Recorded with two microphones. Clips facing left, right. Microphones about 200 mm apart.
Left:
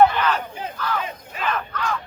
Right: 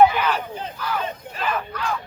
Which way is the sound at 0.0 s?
10° right (ahead or behind).